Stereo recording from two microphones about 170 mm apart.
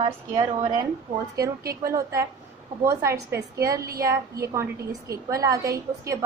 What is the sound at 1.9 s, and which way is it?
A woman's voice, 20° right (ahead or behind).